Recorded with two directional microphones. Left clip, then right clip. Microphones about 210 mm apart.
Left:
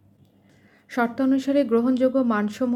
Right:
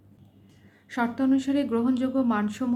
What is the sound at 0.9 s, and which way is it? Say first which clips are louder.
Speech: left 3 dB; 25° left (ahead or behind).